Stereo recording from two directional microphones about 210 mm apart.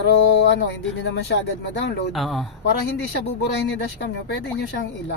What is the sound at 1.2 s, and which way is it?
Speech, 55° left (ahead or behind).